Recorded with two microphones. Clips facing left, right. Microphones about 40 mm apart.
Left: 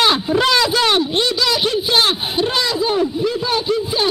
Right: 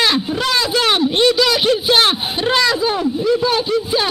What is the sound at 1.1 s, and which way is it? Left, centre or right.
Speech, right.